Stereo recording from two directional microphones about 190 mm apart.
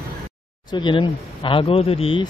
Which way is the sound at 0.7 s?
25° left (ahead or behind).